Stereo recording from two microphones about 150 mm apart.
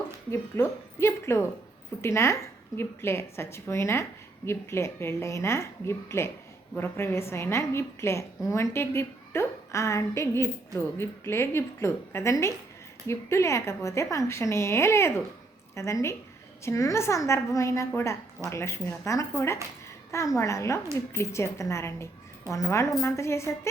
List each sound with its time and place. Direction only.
0.3 s a woman's voice: 15° left (ahead or behind)